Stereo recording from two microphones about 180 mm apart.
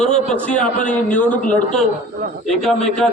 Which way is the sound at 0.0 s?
40° left (ahead or behind).